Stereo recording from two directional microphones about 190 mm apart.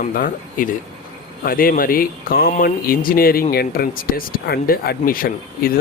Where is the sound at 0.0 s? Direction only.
45° left (ahead or behind).